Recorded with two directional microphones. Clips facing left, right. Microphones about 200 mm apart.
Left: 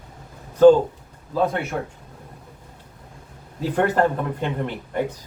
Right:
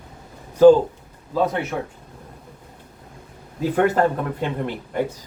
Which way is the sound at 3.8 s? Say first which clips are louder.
Right 1 dB; 5° right (ahead or behind).